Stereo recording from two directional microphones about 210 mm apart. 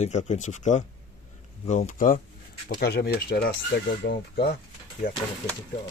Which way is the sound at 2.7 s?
50° left (ahead or behind).